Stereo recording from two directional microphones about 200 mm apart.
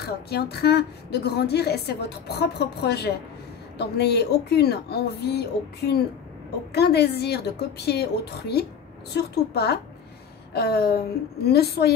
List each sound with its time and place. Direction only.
0.0 s a woman's voice: 55° left (ahead or behind)